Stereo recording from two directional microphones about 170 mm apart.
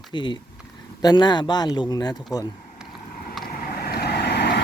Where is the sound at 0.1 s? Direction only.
25° left (ahead or behind).